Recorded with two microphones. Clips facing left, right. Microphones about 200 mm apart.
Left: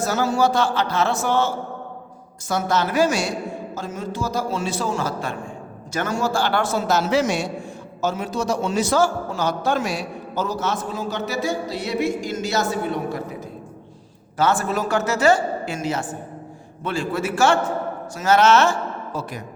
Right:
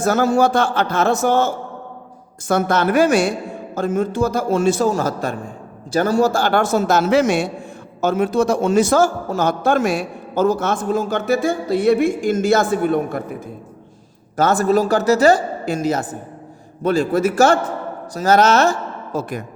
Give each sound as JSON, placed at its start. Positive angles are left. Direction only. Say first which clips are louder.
{"t": 0.0, "sound": "a man's voice", "louder": "right 5 dB", "side_deg": -55}
{"t": 14.3, "sound": "a woman's voice", "louder": "right 6 dB", "side_deg": -40}